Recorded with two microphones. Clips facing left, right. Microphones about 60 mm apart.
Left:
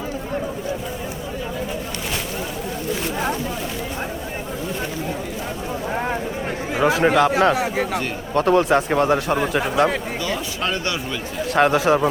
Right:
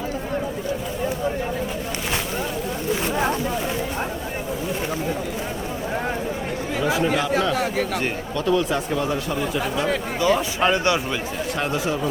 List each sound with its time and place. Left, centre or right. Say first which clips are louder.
6.8 s speech: left 6 dB; left
7.5 s speech: left 1 dB; centre
8.4 s speech: left 6 dB; left
10.2 s speech: right 5 dB; centre
11.5 s speech: left 10 dB; left